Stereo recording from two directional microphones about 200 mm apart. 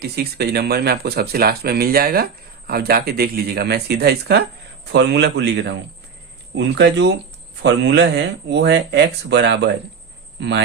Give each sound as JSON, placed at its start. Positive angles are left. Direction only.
{"t": 0.0, "sound": "speech", "side_deg": -55}